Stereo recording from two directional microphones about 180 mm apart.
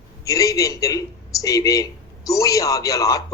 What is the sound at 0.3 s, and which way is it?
Speech, 20° left (ahead or behind).